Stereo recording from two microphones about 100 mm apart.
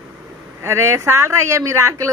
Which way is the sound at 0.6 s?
25° right (ahead or behind).